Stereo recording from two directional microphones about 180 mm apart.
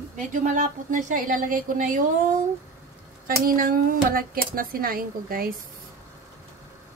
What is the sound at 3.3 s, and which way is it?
Speech, 55° right (ahead or behind).